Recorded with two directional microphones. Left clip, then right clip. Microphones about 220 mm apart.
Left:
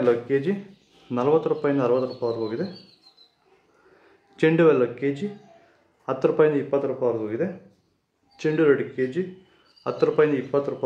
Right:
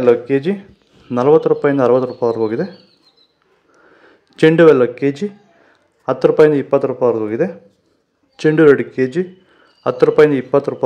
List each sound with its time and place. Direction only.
0.0 s a man's voice: 35° right (ahead or behind)
4.4 s a man's voice: 35° right (ahead or behind)